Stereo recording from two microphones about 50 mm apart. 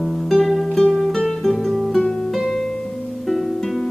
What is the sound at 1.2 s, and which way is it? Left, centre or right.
Guitar, centre.